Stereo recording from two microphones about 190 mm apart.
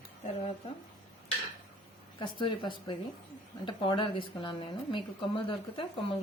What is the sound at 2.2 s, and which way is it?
A woman's voice, 25° left (ahead or behind).